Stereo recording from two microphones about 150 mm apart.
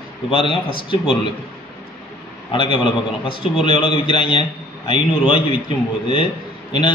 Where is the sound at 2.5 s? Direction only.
35° left (ahead or behind).